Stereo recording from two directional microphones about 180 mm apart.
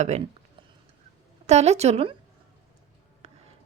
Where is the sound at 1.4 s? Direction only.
40° right (ahead or behind).